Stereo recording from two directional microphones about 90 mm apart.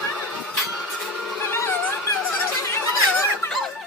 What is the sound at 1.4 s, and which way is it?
Music, 25° left (ahead or behind).